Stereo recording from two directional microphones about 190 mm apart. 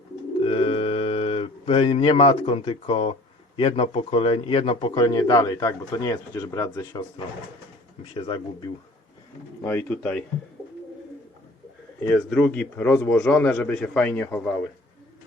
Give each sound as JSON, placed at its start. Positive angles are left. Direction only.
{"t": 0.4, "sound": "a sound", "side_deg": 30}
{"t": 3.5, "sound": "a man's voice", "side_deg": 30}
{"t": 8.1, "sound": "a man's voice", "side_deg": 25}
{"t": 9.6, "sound": "a man's voice", "side_deg": 5}
{"t": 12.0, "sound": "a man's voice", "side_deg": 5}